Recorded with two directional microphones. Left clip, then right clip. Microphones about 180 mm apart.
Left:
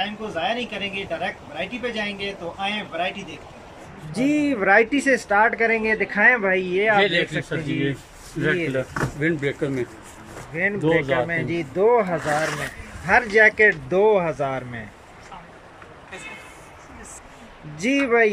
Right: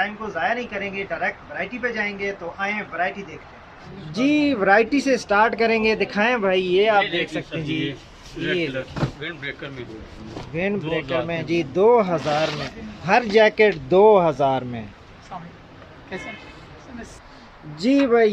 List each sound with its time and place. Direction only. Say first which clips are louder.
0.4 s speech: right 1 dB; 15° left (ahead or behind)
4.3 s speech: right 1 dB; 10° right (ahead or behind)
8.4 s speech: left 2 dB; 30° left (ahead or behind)
10.5 s speech: left 4 dB; 15° right (ahead or behind)
11.0 s speech: left 3 dB; 35° left (ahead or behind)
11.2 s speech: right 1 dB; 15° right (ahead or behind)
17.8 s speech: right 1 dB; 15° right (ahead or behind)